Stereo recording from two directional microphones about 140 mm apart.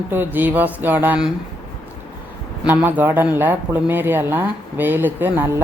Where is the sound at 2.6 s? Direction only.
15° right (ahead or behind).